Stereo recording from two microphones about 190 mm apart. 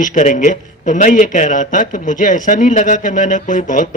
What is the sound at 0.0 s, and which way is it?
A man's voice, 40° left (ahead or behind).